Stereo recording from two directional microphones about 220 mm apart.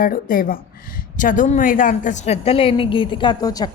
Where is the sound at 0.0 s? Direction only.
40° left (ahead or behind).